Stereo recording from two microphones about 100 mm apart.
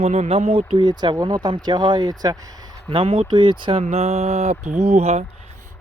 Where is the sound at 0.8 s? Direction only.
45° right (ahead or behind).